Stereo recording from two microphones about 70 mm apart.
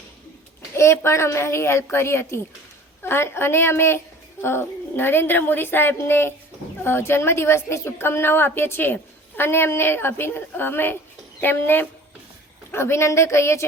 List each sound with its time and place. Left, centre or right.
0.8 s a woman's voice: left